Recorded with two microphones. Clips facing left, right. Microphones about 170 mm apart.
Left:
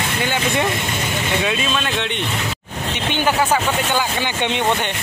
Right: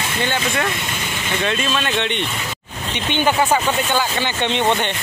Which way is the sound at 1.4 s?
Centre (ahead or behind).